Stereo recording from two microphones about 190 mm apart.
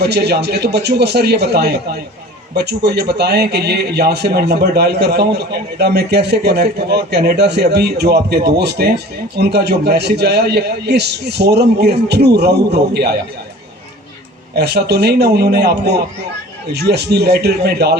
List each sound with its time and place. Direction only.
0.0 s a man's voice: 60° right (ahead or behind)
14.5 s a man's voice: 60° right (ahead or behind)